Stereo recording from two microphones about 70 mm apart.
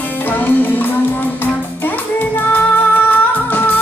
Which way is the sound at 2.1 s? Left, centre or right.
Left.